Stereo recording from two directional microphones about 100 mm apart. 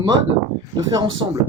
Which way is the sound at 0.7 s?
45° right (ahead or behind).